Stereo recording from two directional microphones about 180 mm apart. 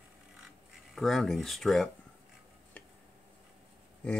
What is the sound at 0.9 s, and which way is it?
Speech, centre (ahead or behind).